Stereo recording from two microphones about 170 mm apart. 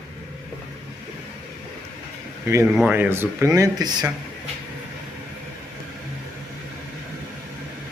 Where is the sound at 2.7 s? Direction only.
5° right (ahead or behind); by 4.1 s 25° right (ahead or behind).